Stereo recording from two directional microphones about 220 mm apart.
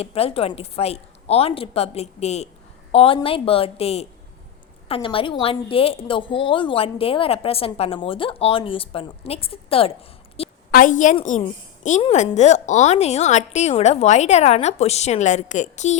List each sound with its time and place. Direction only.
0.0 s a woman's voice: 25° left (ahead or behind)
10.7 s a woman's voice: 40° left (ahead or behind)